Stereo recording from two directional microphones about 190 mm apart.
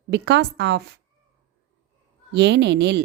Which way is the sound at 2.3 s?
65° right (ahead or behind).